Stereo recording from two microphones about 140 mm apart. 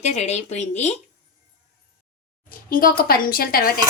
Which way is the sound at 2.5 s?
90° left.